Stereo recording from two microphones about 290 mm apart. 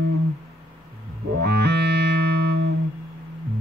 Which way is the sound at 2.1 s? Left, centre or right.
Right.